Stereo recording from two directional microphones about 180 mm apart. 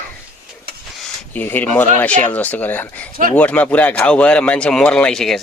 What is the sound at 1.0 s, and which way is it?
Speech, 10° left (ahead or behind).